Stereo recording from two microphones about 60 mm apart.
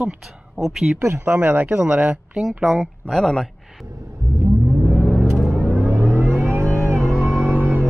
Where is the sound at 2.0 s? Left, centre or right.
Centre.